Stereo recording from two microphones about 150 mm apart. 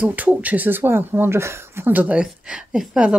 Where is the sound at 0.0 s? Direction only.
10° right (ahead or behind).